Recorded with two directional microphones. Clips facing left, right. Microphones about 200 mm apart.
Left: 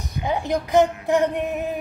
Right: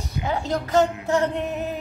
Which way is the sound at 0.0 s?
15° left (ahead or behind).